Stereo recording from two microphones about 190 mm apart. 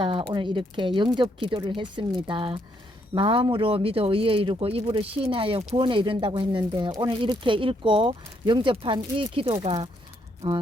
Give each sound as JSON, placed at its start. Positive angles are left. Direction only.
{"t": 0.0, "sound": "speech", "side_deg": -25}